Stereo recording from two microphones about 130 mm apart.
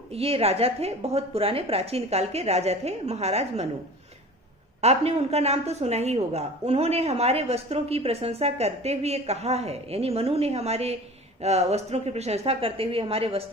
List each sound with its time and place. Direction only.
0.1 s a woman's voice: 50° right (ahead or behind)
4.8 s a woman's voice: 55° right (ahead or behind)